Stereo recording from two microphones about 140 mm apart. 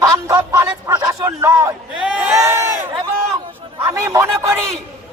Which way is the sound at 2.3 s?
20° right (ahead or behind).